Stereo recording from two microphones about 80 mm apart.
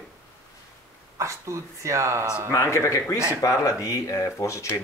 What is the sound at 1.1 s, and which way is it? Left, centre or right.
Speech, right.